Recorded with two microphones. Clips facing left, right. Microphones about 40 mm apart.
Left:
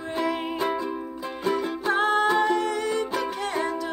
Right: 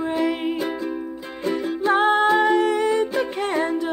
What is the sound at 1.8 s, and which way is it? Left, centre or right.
Music, right.